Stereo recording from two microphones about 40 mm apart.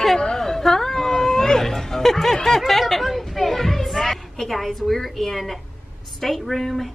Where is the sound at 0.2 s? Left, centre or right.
Centre.